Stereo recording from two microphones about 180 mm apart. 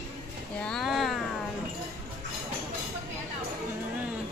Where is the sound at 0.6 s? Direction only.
Centre (ahead or behind).